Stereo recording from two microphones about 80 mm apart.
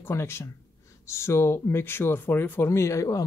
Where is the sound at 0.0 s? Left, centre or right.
Left.